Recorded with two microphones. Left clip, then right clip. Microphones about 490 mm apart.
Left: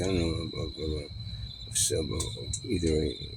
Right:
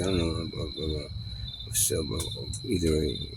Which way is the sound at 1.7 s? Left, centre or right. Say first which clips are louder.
Even; right.